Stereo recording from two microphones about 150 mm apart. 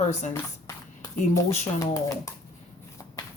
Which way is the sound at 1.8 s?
20° left (ahead or behind).